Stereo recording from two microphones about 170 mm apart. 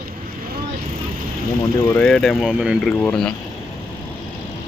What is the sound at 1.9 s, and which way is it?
Speech, 5° left (ahead or behind).